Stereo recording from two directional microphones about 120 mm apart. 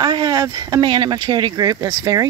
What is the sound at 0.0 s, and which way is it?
Speech, 35° right (ahead or behind).